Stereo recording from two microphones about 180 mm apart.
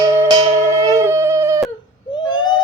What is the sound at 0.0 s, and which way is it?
Music, 25° right (ahead or behind).